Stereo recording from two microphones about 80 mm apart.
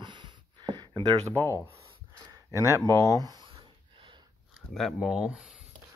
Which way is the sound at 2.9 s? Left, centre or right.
Right.